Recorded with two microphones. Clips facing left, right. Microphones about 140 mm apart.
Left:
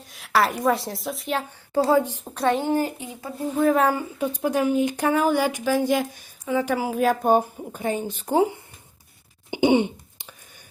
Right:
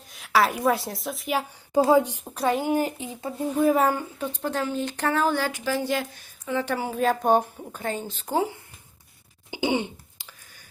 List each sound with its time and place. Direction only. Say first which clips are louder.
0.0 s a woman's voice: even; centre (ahead or behind)
1.7 s speech: right 1 dB; 15° right (ahead or behind)
3.6 s speech: left 1 dB; 5° right (ahead or behind)
4.2 s speech: left 5 dB; 10° left (ahead or behind)
9.5 s cough: left 7 dB; 20° left (ahead or behind)